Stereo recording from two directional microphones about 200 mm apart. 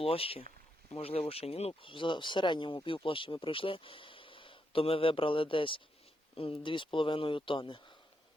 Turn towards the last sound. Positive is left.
turn(degrees=25)  # may be behind; listen again after turning